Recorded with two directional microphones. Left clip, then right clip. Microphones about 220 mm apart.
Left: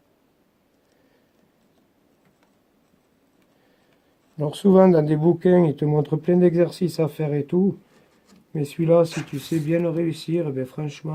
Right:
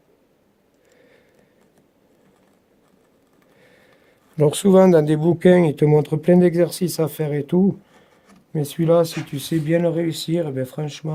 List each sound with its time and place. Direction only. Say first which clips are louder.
4.4 s speech: right 3 dB; 40° right (ahead or behind)